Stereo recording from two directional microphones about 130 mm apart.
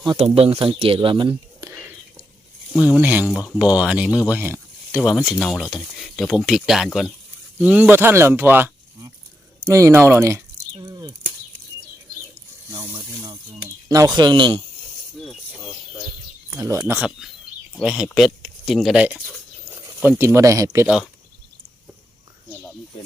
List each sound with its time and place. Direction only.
0.3 s speech: 50° right (ahead or behind)
1.7 s whispering: 15° right (ahead or behind)
2.7 s speech: 10° right (ahead or behind)
4.3 s a sound: 15° right (ahead or behind)
4.9 s speech: centre (ahead or behind)
7.6 s speech: 10° right (ahead or behind); by 11.1 s 30° right (ahead or behind)
12.9 s speech: 35° right (ahead or behind)
15.2 s a sound: centre (ahead or behind)
16.5 s speech: 20° right (ahead or behind)
17.8 s speech: 5° right (ahead or behind)
18.4 s a sound: centre (ahead or behind)
20.1 s speech: 20° right (ahead or behind)